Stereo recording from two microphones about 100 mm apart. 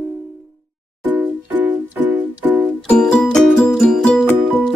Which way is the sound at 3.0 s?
5° left (ahead or behind).